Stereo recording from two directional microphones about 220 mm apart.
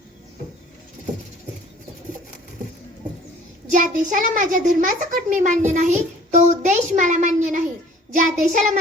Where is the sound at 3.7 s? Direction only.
35° right (ahead or behind).